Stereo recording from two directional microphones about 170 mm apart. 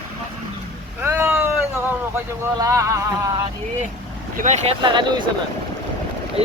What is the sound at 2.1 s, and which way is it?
Speech, 15° right (ahead or behind).